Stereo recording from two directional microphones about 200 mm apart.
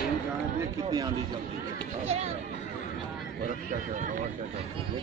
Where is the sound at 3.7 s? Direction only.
40° right (ahead or behind).